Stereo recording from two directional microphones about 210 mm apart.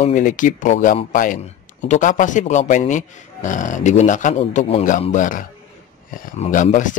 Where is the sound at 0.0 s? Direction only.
40° left (ahead or behind).